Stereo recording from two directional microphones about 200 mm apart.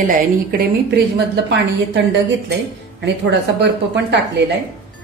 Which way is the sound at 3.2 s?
60° right (ahead or behind).